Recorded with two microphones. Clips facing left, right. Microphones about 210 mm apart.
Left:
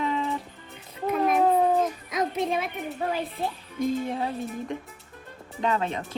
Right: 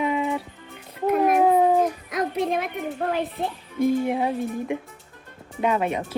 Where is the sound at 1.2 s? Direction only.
10° right (ahead or behind).